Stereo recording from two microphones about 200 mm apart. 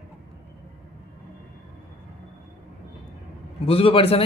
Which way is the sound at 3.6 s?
25° left (ahead or behind).